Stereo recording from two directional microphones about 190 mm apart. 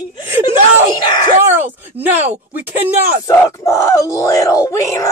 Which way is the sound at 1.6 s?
10° right (ahead or behind).